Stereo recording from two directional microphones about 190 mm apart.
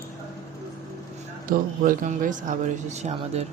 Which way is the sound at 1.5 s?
45° right (ahead or behind).